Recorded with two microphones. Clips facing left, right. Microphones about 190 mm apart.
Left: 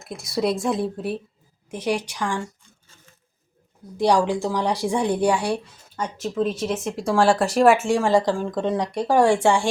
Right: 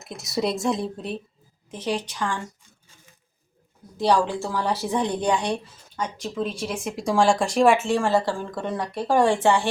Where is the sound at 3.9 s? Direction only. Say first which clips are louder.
Left 2 dB; 15° left (ahead or behind).